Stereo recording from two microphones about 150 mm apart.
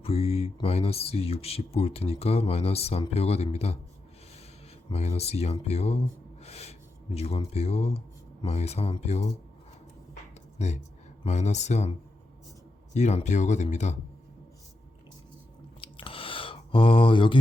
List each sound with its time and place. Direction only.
0.0 s speech: 40° left (ahead or behind)
4.9 s speech: 45° left (ahead or behind)
10.6 s speech: 45° left (ahead or behind)
15.8 s a sound: 35° left (ahead or behind)